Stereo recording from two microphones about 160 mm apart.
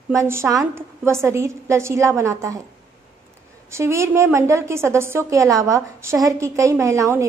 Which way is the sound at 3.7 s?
15° right (ahead or behind).